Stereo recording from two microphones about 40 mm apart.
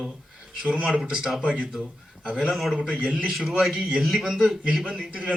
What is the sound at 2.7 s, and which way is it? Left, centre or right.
Speech, right.